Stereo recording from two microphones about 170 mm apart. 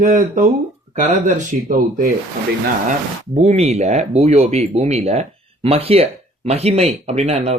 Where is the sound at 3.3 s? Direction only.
40° right (ahead or behind).